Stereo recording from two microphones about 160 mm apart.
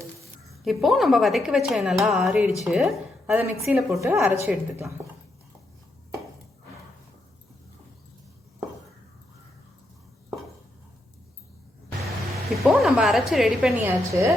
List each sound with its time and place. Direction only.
0.6 s a woman's voice: centre (ahead or behind)
12.6 s a woman's voice: 5° right (ahead or behind)
13.8 s a woman's voice: 20° right (ahead or behind)